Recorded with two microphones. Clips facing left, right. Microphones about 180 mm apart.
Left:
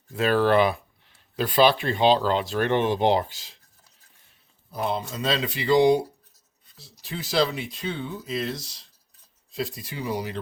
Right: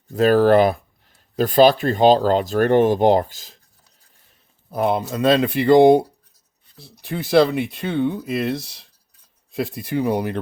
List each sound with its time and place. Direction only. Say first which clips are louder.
0.1 s speech: right 7 dB; 40° right (ahead or behind)
4.7 s speech: right 7 dB; 55° right (ahead or behind)